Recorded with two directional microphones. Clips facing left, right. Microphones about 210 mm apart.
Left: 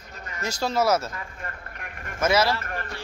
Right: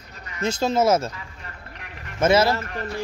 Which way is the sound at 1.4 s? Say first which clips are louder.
Left 3 dB; 50° left (ahead or behind).